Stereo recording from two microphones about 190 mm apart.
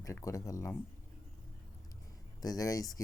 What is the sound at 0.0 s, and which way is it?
Speech, 15° left (ahead or behind).